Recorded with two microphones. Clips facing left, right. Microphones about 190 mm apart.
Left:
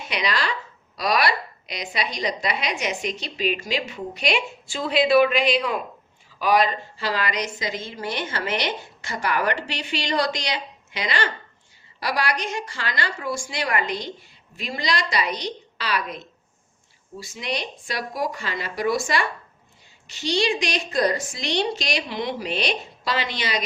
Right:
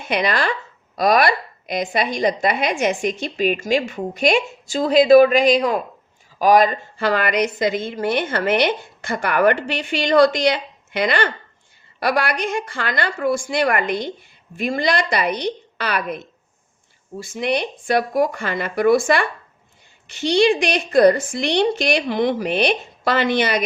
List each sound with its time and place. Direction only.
0.0 s a woman's voice: 50° right (ahead or behind)